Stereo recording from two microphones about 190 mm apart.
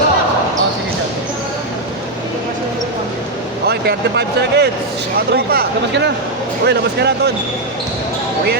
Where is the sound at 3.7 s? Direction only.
60° right (ahead or behind).